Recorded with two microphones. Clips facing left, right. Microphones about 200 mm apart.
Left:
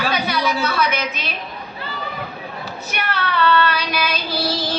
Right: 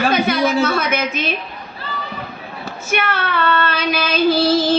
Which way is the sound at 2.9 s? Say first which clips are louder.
Right 4 dB; 50° right (ahead or behind).